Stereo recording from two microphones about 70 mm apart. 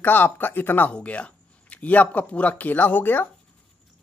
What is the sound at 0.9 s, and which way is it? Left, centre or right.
Speech, centre.